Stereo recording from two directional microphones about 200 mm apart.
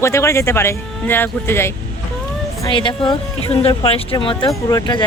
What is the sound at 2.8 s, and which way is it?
Speech, 25° left (ahead or behind).